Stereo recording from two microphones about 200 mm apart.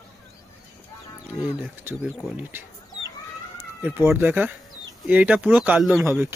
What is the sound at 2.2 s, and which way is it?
Speech, 10° right (ahead or behind).